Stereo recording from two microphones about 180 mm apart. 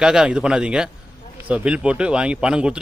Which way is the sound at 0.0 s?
5° right (ahead or behind).